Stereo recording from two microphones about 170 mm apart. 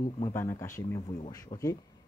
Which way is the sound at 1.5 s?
35° left (ahead or behind).